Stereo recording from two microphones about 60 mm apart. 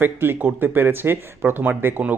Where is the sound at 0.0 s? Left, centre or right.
Right.